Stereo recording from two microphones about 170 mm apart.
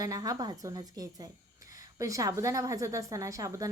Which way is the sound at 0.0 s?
20° right (ahead or behind).